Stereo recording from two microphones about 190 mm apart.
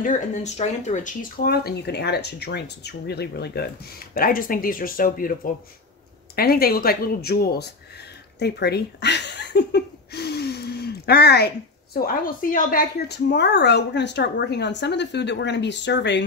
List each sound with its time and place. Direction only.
0.0 s speech: 40° left (ahead or behind); by 16.3 s 65° left (ahead or behind)